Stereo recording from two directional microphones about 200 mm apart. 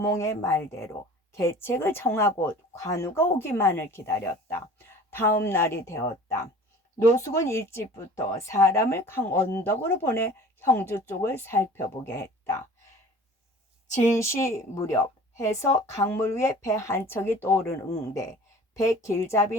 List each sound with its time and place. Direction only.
0.0 s speech: 15° left (ahead or behind)
7.2 s speech: 15° left (ahead or behind)
13.8 s a woman's voice: 35° left (ahead or behind)
14.2 s speech: 15° left (ahead or behind)